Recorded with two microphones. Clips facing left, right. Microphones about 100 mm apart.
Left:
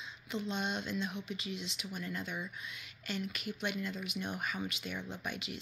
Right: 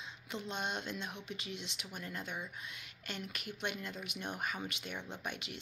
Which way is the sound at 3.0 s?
50° right (ahead or behind).